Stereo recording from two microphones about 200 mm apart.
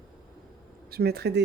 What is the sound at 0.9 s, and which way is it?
Speech, 50° right (ahead or behind).